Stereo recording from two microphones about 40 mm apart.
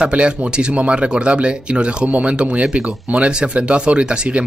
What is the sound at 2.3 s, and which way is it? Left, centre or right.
Speech, right.